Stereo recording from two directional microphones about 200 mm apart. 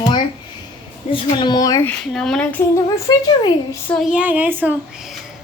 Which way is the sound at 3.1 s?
20° left (ahead or behind).